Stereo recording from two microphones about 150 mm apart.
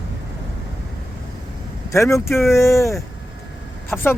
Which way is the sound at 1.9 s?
20° left (ahead or behind).